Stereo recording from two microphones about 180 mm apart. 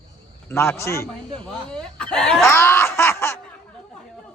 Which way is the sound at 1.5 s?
5° left (ahead or behind).